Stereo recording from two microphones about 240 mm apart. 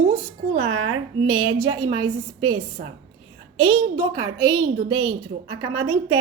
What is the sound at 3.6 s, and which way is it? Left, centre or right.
A woman's voice, centre.